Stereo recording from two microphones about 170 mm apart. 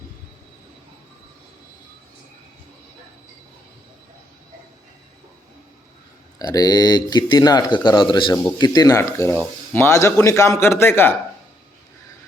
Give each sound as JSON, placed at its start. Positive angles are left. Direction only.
{"t": 6.4, "sound": "speech", "side_deg": 25}